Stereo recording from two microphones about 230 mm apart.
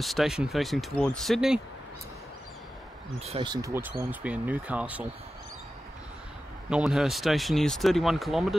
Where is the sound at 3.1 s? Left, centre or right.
Right; by 5.1 s centre.